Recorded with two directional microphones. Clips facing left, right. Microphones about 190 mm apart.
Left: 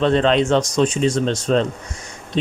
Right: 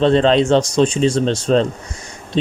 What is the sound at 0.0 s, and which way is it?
Speech, 30° right (ahead or behind).